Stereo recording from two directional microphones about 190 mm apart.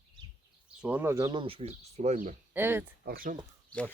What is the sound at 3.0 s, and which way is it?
Speech, 50° right (ahead or behind).